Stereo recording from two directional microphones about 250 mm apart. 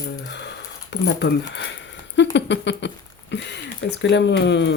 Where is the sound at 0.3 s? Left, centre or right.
Left.